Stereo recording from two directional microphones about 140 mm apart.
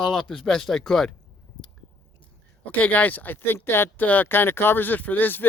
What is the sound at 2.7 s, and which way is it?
Speech, 10° left (ahead or behind).